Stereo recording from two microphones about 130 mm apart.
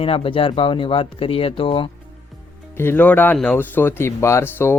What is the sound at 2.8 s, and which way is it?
Speech, 15° left (ahead or behind).